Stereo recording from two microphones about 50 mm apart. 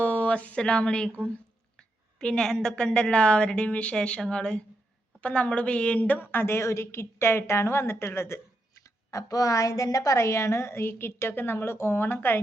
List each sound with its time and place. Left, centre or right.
0.0 s speech: left
2.1 s a woman's voice: centre; by 6.2 s left
6.3 s speech: left
6.7 s a woman's voice: left
9.1 s a woman's voice: left